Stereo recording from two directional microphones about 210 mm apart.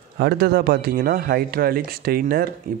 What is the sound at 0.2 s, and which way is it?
Speech, 50° right (ahead or behind).